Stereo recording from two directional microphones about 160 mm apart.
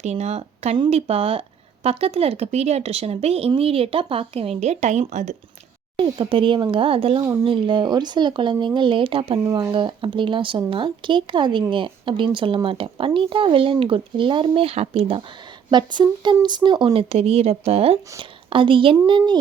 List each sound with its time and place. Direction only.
0.0 s speech: 45° right (ahead or behind)
6.0 s speech: 35° right (ahead or behind)
9.4 s speech: 20° right (ahead or behind)
9.7 s speech: 30° right (ahead or behind)